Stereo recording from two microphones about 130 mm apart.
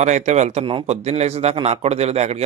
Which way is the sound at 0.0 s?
60° right (ahead or behind).